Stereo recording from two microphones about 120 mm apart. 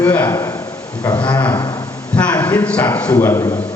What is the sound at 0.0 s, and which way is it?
Speech, 15° left (ahead or behind).